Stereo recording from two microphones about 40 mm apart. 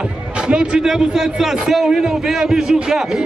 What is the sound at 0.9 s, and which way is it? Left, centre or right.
A man's voice, centre.